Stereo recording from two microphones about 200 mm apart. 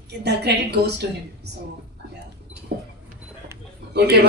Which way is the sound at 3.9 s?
55° right (ahead or behind).